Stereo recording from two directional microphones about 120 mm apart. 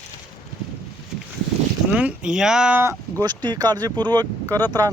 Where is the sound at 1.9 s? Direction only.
10° right (ahead or behind).